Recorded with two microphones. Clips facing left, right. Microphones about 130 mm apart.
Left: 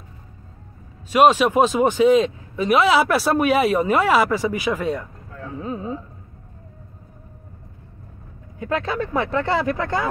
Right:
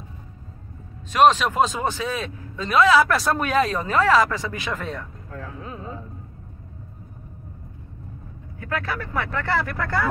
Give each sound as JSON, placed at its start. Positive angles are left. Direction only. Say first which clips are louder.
{"t": 1.1, "sound": "a man's voice", "louder": "left 2 dB", "side_deg": 10}
{"t": 8.5, "sound": "speech", "louder": "left 5 dB", "side_deg": 25}